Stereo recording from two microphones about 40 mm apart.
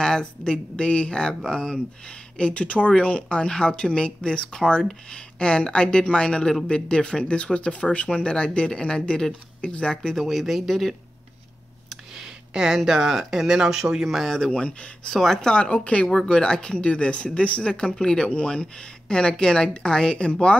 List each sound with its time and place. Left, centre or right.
0.0 s speech: centre
10.2 s speech: centre
11.9 s speech: centre
14.0 s speech: centre
14.6 s speech: left
15.0 s speech: centre
15.4 s speech: left
16.1 s speech: centre
16.7 s speech: left